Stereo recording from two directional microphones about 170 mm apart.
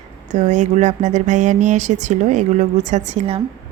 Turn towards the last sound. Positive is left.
turn(degrees=-35)  # may be behind; listen again after turning